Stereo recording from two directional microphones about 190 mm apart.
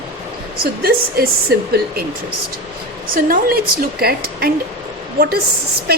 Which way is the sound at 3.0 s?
50° right (ahead or behind).